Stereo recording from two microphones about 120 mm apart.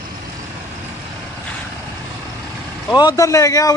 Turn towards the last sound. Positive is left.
turn(degrees=30)  # may be behind; listen again after turning